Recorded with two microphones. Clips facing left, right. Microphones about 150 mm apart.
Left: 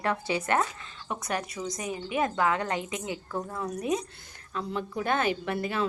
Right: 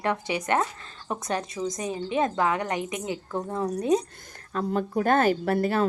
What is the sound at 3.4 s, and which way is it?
Speech, 30° right (ahead or behind).